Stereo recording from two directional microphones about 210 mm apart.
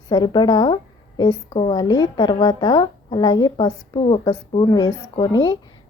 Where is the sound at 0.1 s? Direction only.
20° left (ahead or behind).